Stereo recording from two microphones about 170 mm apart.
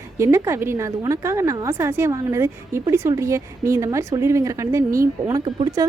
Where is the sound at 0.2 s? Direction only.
15° right (ahead or behind).